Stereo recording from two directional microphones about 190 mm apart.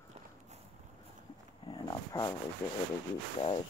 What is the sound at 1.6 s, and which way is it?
Dog, 20° left (ahead or behind).